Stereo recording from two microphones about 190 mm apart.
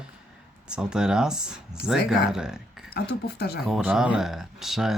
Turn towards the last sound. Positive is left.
turn(degrees=0)  # may be behind; listen again after turning